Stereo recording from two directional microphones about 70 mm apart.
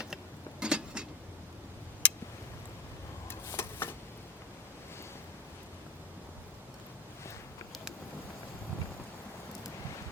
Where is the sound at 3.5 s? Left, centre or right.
Left.